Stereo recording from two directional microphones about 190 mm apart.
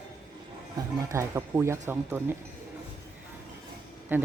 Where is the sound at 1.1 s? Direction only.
15° right (ahead or behind).